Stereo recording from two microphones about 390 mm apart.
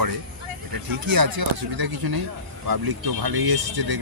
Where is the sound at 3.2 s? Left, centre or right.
Right.